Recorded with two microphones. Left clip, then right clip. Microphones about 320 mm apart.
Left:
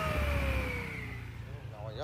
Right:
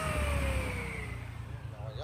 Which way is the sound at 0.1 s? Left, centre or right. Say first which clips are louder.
Even; centre.